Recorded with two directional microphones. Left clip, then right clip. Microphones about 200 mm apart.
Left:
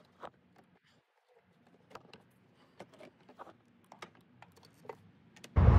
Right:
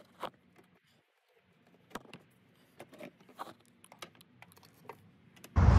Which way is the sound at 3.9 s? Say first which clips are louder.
Right 1 dB; 20° right (ahead or behind).